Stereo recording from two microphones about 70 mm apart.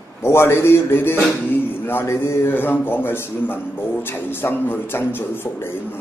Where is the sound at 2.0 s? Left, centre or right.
Left.